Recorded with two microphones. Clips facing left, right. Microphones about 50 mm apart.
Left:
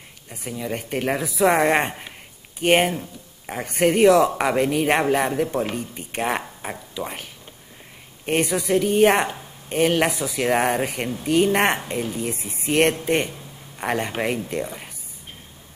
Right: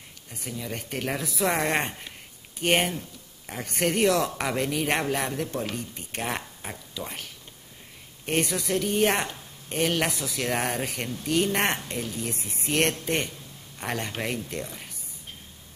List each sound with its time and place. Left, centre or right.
0.3 s a woman's voice: centre
8.3 s a woman's voice: centre